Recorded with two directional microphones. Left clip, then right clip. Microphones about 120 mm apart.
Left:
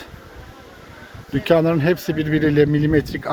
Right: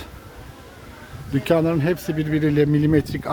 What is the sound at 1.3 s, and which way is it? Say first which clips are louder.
Speech: left 3 dB; 5° right (ahead or behind).